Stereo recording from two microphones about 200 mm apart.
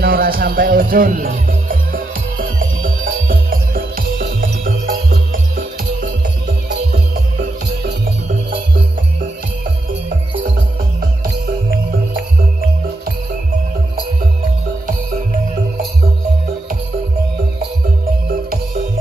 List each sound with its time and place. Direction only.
0.0 s music: 45° right (ahead or behind)